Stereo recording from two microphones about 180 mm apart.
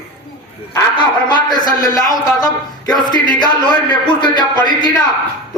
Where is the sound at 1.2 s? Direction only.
25° left (ahead or behind).